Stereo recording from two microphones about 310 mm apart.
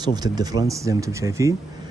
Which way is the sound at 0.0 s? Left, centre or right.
Centre.